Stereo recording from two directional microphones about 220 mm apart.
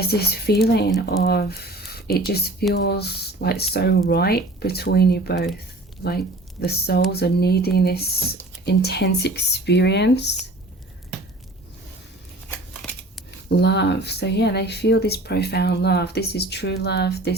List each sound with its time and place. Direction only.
0.0 s speech: 45° left (ahead or behind)
12.8 s scissors: centre (ahead or behind)
13.6 s speech: 50° left (ahead or behind)